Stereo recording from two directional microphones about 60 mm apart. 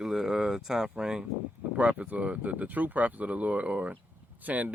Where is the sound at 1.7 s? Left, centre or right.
Right.